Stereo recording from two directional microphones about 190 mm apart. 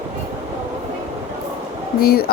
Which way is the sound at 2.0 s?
55° left (ahead or behind).